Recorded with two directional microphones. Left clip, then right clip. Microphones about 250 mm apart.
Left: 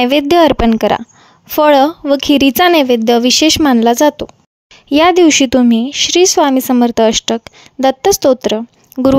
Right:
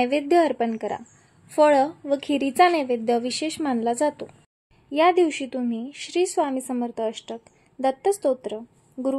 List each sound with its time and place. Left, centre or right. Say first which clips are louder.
0.0 s speech: left 11 dB; left